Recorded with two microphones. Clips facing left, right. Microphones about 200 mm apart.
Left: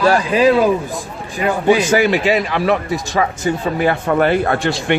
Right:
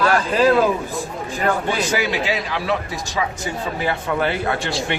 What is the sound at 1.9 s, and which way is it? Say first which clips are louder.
A man's voice: left 7 dB; 55° left (ahead or behind).